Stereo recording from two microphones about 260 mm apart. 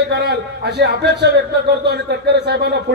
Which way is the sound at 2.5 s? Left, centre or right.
Right.